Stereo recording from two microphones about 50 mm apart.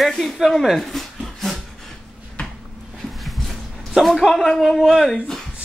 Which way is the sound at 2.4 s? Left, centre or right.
Left.